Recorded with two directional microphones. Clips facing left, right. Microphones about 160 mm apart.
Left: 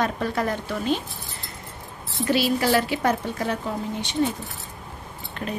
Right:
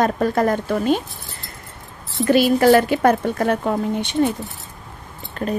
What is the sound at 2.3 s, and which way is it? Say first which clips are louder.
Speech: right 8 dB; 50° right (ahead or behind).